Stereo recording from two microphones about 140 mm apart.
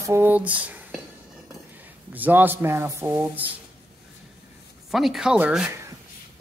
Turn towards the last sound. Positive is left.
turn(degrees=-10)  # may be behind; listen again after turning